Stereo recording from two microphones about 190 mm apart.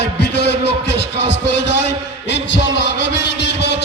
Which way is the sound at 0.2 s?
60° left (ahead or behind).